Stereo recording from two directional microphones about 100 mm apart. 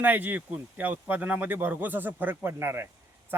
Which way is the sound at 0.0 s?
20° right (ahead or behind).